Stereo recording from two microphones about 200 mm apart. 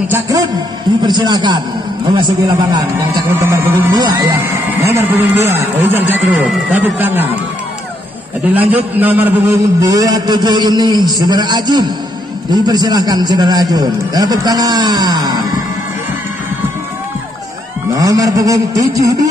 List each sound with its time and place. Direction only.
0.1 s a man's voice: 15° right (ahead or behind)
8.5 s a man's voice: 10° right (ahead or behind)
17.9 s speech: 15° right (ahead or behind)